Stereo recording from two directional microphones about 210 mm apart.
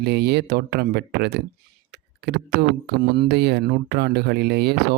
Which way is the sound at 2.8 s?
50° right (ahead or behind).